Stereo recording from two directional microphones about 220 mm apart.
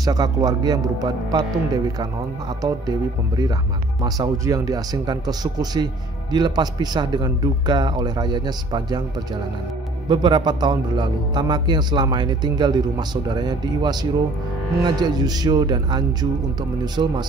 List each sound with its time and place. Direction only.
0.0 s a man's voice: 15° right (ahead or behind)
10.0 s a man's voice: 20° right (ahead or behind)